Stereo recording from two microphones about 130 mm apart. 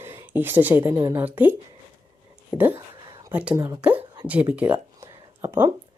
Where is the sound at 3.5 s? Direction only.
25° right (ahead or behind).